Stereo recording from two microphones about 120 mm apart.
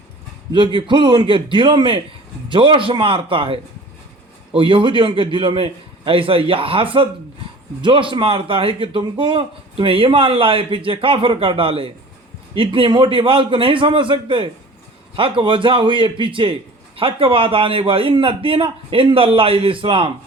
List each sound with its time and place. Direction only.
0.5 s a man's voice: 40° right (ahead or behind)